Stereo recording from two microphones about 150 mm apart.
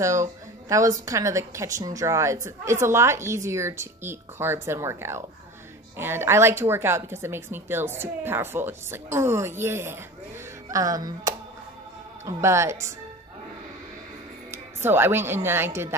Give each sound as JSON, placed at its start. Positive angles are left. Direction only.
{"t": 0.0, "sound": "a woman's voice", "side_deg": -20}
{"t": 14.5, "sound": "speech", "side_deg": -15}